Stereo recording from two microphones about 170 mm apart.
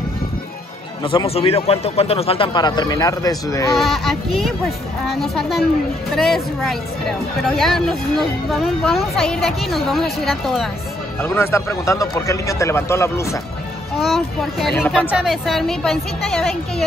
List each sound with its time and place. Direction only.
1.0 s a man's voice: 35° left (ahead or behind)
3.7 s speech: centre (ahead or behind)
11.1 s speech: 10° left (ahead or behind)
13.9 s speech: centre (ahead or behind)